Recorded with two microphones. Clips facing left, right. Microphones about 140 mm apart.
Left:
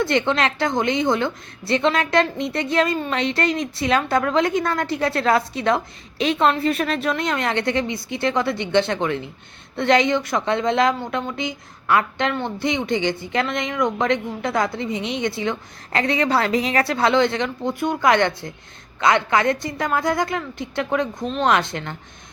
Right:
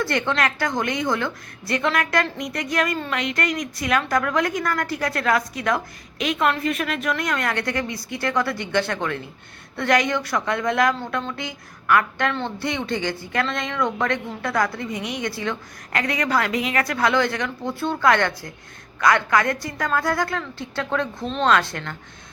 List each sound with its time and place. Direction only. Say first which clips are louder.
0.0 s a woman's voice: left 3 dB; 20° left (ahead or behind)